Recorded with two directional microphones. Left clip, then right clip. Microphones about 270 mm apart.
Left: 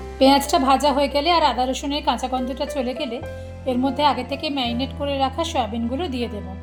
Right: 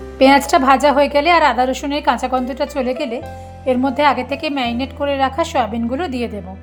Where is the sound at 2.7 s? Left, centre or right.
Right.